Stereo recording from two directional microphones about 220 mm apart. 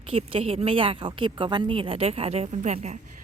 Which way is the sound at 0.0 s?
25° right (ahead or behind).